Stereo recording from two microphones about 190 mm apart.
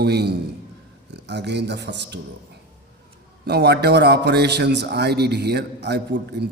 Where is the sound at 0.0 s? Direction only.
60° right (ahead or behind).